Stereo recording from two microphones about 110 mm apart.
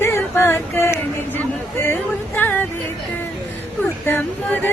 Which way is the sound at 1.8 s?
20° left (ahead or behind).